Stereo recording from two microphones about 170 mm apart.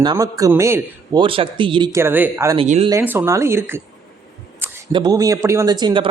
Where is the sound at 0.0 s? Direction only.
25° right (ahead or behind).